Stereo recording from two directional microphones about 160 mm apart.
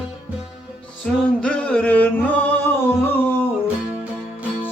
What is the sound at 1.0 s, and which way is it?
Music, 5° left (ahead or behind).